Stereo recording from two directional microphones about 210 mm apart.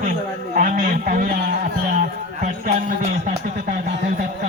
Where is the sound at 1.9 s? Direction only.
40° right (ahead or behind).